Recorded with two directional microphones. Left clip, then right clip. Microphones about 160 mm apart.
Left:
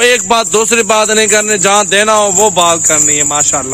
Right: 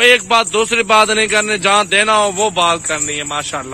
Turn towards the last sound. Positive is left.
turn(degrees=15)  # may be behind; listen again after turning